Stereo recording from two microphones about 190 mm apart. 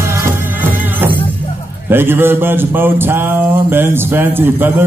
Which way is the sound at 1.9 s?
10° right (ahead or behind).